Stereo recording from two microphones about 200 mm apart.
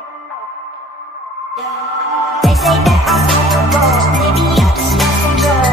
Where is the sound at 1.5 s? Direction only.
Centre (ahead or behind).